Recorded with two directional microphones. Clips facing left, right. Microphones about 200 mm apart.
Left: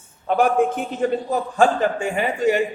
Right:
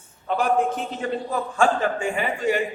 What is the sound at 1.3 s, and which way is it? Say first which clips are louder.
A man's voice: even; 40° left (ahead or behind).